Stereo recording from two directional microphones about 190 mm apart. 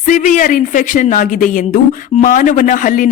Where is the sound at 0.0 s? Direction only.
40° left (ahead or behind).